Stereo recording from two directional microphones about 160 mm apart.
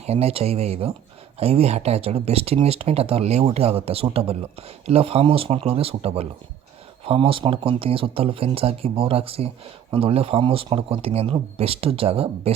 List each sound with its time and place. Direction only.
0.0 s speech: 40° right (ahead or behind)